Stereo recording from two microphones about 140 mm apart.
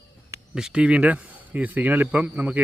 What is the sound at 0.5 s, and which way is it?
A man's voice, 5° right (ahead or behind).